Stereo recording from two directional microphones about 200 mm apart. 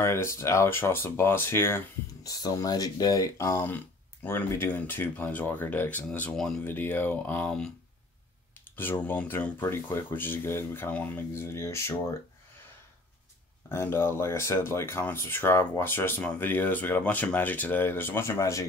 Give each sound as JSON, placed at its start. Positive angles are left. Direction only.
{"t": 0.0, "sound": "speech", "side_deg": 15}
{"t": 8.7, "sound": "speech", "side_deg": 10}
{"t": 13.7, "sound": "speech", "side_deg": 10}